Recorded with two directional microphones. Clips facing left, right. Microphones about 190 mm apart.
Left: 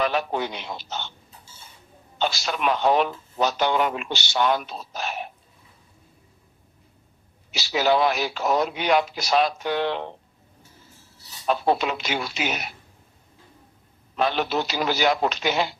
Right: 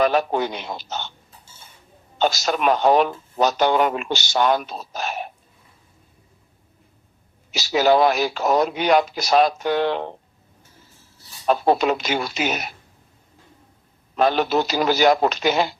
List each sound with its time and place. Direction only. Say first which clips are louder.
0.0 s speech: right 5 dB; 45° right (ahead or behind)
2.1 s speech: right 5 dB; 45° right (ahead or behind)
7.5 s speech: right 4 dB; 45° right (ahead or behind)
11.4 s speech: right 4 dB; 45° right (ahead or behind)
14.2 s speech: right 5 dB; 45° right (ahead or behind)